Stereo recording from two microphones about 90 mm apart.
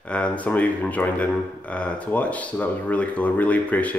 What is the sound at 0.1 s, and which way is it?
Speech, 15° left (ahead or behind).